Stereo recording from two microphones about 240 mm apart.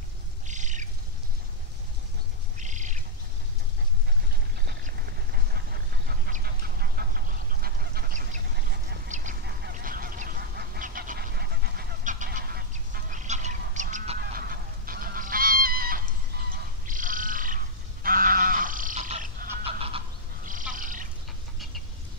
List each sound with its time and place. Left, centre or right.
0.5 s cat: right
2.6 s bird: right
4.6 s duck: right
16.8 s frog: right
18.0 s wild animals: right
20.7 s a sound: right